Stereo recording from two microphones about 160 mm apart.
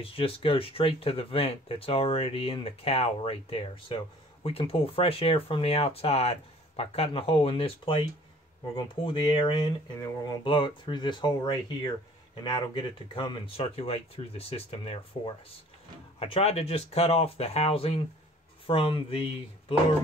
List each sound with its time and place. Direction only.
0.0 s speech: 35° left (ahead or behind)
13.1 s speech: 30° left (ahead or behind)